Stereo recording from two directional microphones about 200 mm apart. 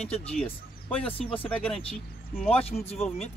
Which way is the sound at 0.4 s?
5° left (ahead or behind).